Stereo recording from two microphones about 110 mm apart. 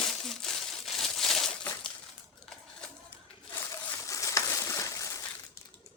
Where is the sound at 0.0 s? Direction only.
5° left (ahead or behind).